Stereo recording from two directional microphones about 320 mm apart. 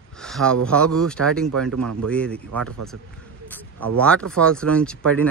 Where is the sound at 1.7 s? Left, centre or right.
Right.